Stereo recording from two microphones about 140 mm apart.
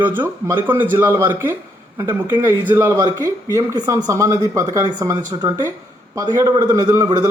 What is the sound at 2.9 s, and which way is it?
Speech, 25° right (ahead or behind).